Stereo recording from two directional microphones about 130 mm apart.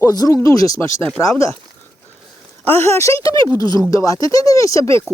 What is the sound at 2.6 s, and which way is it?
Speech, 20° left (ahead or behind).